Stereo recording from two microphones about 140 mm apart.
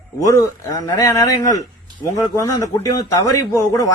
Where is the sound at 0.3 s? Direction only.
20° left (ahead or behind).